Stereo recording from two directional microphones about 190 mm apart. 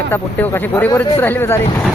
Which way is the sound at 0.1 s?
10° left (ahead or behind).